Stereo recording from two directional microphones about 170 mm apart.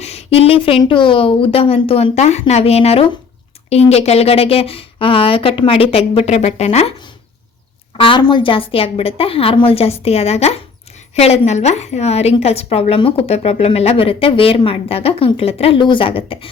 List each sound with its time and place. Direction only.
0.0 s a woman's voice: 40° left (ahead or behind)
7.9 s a woman's voice: 30° left (ahead or behind)